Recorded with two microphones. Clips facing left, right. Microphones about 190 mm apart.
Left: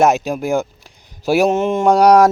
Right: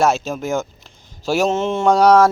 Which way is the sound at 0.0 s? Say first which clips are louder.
Left 3 dB; 15° left (ahead or behind).